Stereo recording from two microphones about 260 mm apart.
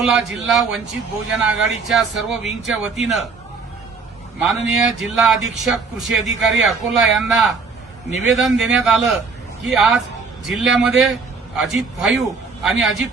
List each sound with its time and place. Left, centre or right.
0.0 s speech: centre
4.4 s speech: centre